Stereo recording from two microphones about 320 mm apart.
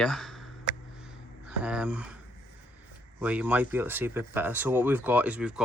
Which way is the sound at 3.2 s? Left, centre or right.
Centre.